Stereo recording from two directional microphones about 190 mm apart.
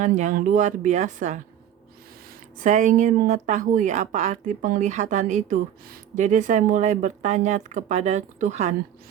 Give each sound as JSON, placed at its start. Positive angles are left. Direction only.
{"t": 0.0, "sound": "a woman's voice", "side_deg": -40}
{"t": 2.6, "sound": "a woman's voice", "side_deg": -40}